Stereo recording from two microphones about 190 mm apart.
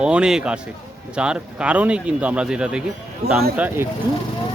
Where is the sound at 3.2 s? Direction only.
55° right (ahead or behind).